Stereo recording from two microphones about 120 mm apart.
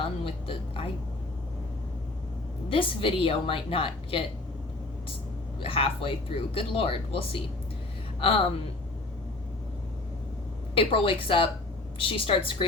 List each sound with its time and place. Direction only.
0.0 s speech: 50° left (ahead or behind)
2.6 s speech: 50° left (ahead or behind)
5.5 s speech: 50° left (ahead or behind)
10.8 s speech: 50° left (ahead or behind)